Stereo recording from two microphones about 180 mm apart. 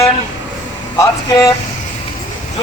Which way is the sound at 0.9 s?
20° left (ahead or behind).